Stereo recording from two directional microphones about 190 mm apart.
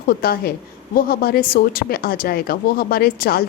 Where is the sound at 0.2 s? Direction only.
55° left (ahead or behind).